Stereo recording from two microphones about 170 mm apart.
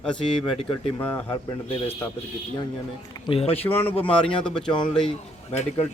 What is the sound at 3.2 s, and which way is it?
Speech, 35° left (ahead or behind).